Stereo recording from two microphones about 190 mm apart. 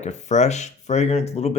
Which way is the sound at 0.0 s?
40° left (ahead or behind).